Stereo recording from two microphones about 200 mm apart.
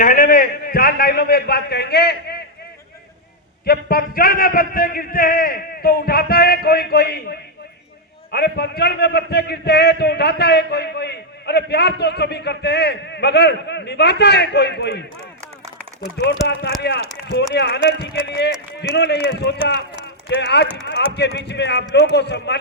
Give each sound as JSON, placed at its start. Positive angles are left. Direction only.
{"t": 0.0, "sound": "a man's voice", "side_deg": 45}
{"t": 3.7, "sound": "a man's voice", "side_deg": 45}
{"t": 16.2, "sound": "a man's voice", "side_deg": 60}